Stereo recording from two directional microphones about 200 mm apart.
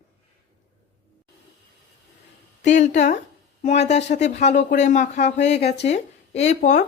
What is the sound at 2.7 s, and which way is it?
Speech, 35° left (ahead or behind).